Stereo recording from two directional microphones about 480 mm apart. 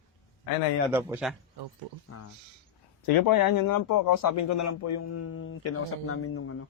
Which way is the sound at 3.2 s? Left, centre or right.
Left.